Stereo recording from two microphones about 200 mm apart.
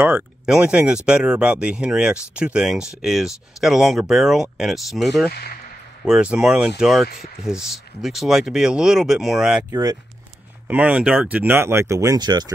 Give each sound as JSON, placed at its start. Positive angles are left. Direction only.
{"t": 0.0, "sound": "speech", "side_deg": -5}
{"t": 5.3, "sound": "speech", "side_deg": 50}
{"t": 6.0, "sound": "speech", "side_deg": -5}
{"t": 9.7, "sound": "speech", "side_deg": -20}
{"t": 10.7, "sound": "speech", "side_deg": -5}